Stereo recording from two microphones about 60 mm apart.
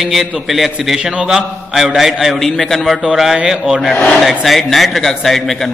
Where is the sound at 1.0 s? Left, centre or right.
Centre.